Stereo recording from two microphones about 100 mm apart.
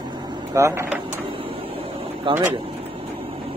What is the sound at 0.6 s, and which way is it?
Speech, 30° right (ahead or behind).